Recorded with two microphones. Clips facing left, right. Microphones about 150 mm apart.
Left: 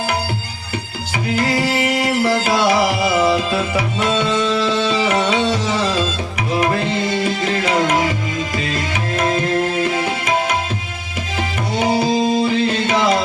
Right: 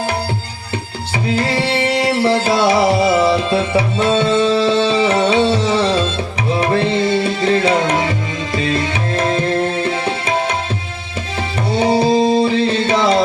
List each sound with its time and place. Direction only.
1.4 s music: 30° right (ahead or behind)
4.3 s tabla: 30° right (ahead or behind)
11.8 s tabla: 30° right (ahead or behind)